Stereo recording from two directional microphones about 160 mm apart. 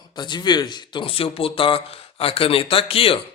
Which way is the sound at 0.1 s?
25° left (ahead or behind).